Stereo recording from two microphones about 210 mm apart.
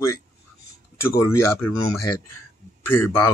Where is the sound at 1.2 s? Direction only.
10° left (ahead or behind).